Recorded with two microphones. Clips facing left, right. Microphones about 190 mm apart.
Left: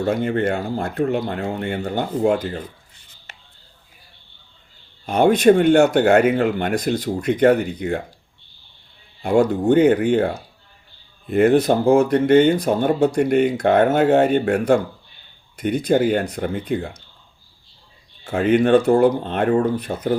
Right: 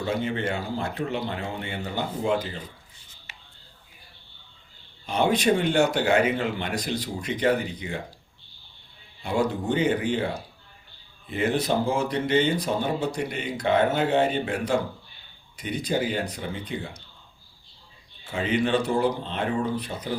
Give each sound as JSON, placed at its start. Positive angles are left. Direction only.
{"t": 0.0, "sound": "speech", "side_deg": 50}
{"t": 5.0, "sound": "speech", "side_deg": 50}
{"t": 9.2, "sound": "speech", "side_deg": 50}
{"t": 18.3, "sound": "speech", "side_deg": 55}